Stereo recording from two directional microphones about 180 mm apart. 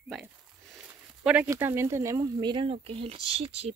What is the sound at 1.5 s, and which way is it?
Speech, 15° right (ahead or behind).